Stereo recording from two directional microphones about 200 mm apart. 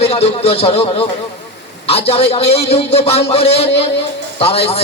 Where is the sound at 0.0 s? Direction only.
30° left (ahead or behind).